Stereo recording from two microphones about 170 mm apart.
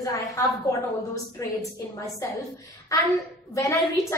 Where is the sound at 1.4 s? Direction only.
20° left (ahead or behind).